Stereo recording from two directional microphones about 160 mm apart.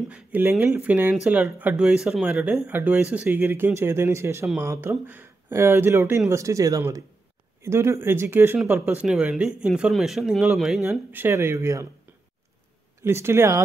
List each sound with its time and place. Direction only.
0.1 s speech: 10° right (ahead or behind)
9.0 s speech: 5° right (ahead or behind)
10.8 s speech: 15° right (ahead or behind)
13.0 s speech: 15° right (ahead or behind)